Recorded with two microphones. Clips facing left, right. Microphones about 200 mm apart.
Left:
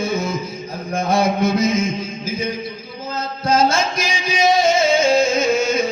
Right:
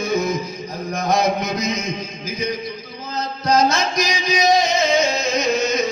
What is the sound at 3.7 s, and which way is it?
Music, 50° left (ahead or behind).